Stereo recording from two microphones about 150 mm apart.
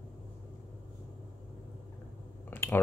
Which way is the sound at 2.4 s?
15° left (ahead or behind).